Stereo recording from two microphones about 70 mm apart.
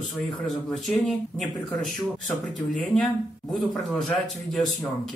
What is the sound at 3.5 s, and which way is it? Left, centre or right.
Speech, centre.